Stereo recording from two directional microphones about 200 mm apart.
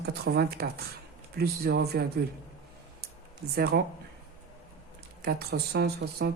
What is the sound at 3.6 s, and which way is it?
Speech, 55° right (ahead or behind).